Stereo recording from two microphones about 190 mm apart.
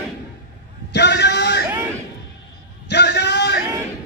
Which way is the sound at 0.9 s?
60° left (ahead or behind).